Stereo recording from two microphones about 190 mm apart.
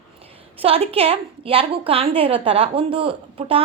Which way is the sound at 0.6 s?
30° right (ahead or behind).